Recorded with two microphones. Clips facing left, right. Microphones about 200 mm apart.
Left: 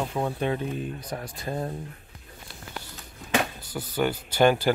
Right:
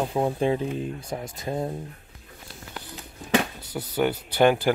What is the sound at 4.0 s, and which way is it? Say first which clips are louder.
Speech: right 1 dB; 15° right (ahead or behind).